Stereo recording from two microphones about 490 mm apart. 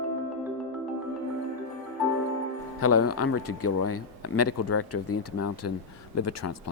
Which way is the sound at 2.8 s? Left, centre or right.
Left.